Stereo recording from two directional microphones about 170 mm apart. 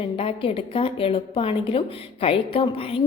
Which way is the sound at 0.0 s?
35° left (ahead or behind).